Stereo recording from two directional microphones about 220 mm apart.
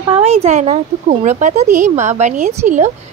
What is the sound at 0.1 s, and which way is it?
A woman's voice, 30° right (ahead or behind).